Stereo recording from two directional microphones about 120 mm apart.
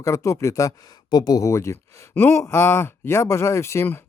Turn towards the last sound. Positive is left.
turn(degrees=20)  # may be behind; listen again after turning